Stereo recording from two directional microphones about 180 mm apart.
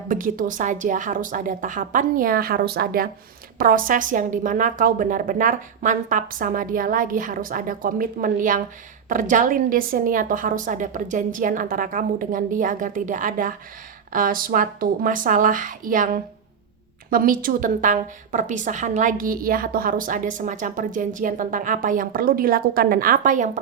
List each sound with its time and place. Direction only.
0.1 s a woman's voice: 50° right (ahead or behind)